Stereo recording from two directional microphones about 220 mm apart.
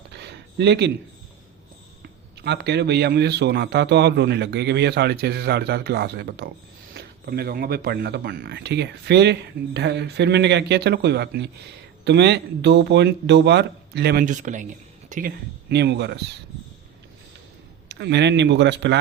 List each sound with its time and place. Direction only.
0.1 s a sound: 50° right (ahead or behind)
2.0 s speech: 45° right (ahead or behind)
15.7 s speech: 50° right (ahead or behind)
17.8 s speech: 50° right (ahead or behind)